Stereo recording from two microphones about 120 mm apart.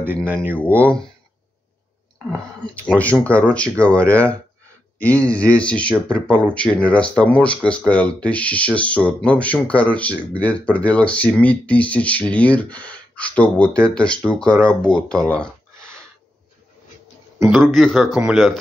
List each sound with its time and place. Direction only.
0.3 s speech: 15° right (ahead or behind)
0.7 s speech: 10° left (ahead or behind)
2.6 s speech: 10° left (ahead or behind)
17.4 s speech: centre (ahead or behind)